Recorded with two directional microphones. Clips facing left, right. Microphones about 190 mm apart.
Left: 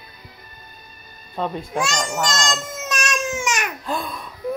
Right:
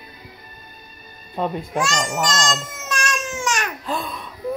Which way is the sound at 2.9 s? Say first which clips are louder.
Left 1 dB; 20° left (ahead or behind).